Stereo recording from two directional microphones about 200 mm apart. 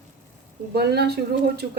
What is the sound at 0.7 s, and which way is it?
Speech, 55° right (ahead or behind).